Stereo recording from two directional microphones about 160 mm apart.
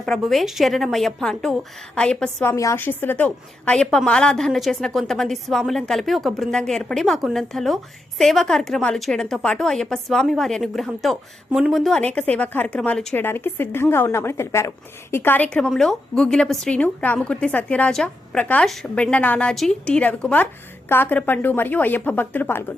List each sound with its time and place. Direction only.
0.0 s a woman's voice: centre (ahead or behind)
2.5 s a woman's voice: 15° left (ahead or behind)